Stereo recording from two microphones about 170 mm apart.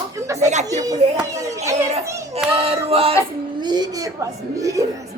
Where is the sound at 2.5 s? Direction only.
35° right (ahead or behind).